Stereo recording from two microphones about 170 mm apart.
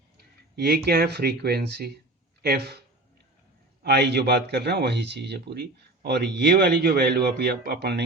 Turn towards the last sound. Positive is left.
turn(degrees=-75)  # may be behind; listen again after turning